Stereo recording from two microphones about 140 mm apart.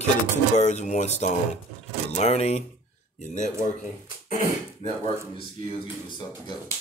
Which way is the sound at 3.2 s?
60° left (ahead or behind).